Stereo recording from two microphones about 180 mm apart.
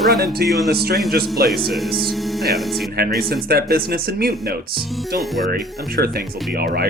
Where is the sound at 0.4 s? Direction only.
Centre (ahead or behind).